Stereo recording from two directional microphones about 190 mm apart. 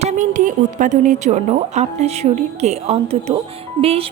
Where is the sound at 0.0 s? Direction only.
40° right (ahead or behind).